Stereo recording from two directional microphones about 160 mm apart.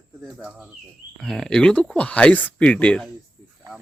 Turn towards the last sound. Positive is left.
turn(degrees=5)  # may be behind; listen again after turning